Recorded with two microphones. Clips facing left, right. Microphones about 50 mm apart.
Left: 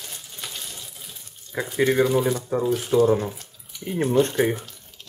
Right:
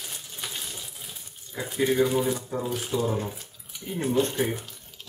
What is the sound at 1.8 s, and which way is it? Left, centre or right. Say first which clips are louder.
Speech: left 3 dB; left.